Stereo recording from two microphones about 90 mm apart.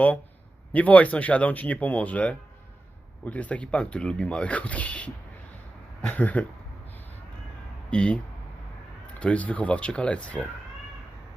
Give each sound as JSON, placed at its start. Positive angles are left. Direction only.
{"t": 0.7, "sound": "speech", "side_deg": 15}
{"t": 7.9, "sound": "speech", "side_deg": 10}